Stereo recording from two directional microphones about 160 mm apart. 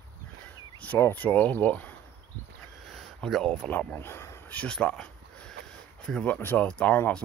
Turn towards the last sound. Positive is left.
turn(degrees=10)  # may be behind; listen again after turning